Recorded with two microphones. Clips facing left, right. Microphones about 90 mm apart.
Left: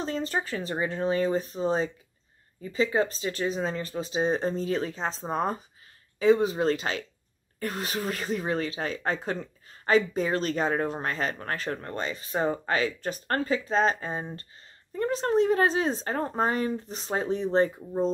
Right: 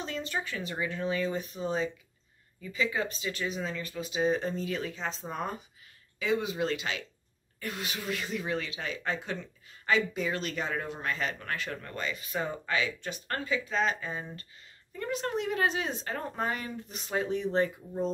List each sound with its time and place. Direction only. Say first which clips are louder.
0.0 s speech: left 5 dB; 40° left (ahead or behind)